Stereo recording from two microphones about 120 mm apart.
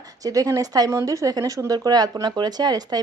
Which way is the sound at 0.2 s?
30° right (ahead or behind).